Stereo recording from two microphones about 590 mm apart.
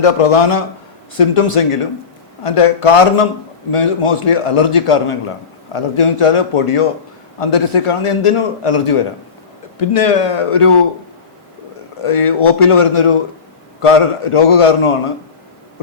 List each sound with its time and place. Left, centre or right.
0.0 s a man's voice: left
12.0 s a man's voice: left